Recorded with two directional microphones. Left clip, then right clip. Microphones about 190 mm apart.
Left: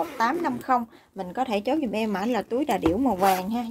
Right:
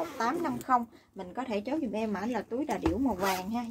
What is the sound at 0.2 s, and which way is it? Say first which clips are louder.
Speech: left 6 dB; 45° left (ahead or behind).